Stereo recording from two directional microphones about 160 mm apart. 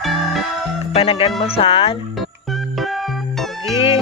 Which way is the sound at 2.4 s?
Centre (ahead or behind).